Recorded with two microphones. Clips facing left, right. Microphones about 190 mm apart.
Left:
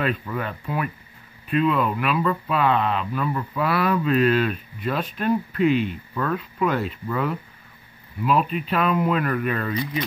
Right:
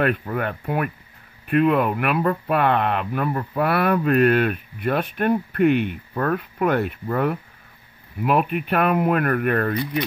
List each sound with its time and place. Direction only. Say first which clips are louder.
0.3 s speech: right 3 dB; 55° right (ahead or behind)